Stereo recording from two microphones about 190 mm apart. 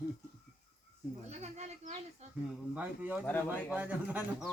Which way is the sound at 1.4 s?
35° right (ahead or behind).